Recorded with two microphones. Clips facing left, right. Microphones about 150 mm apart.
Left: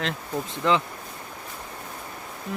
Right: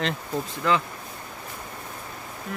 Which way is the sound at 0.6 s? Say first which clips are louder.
Left 1 dB; 20° left (ahead or behind).